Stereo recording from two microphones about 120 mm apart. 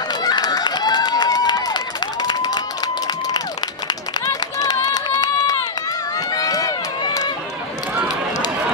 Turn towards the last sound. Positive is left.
turn(degrees=30)  # may be behind; listen again after turning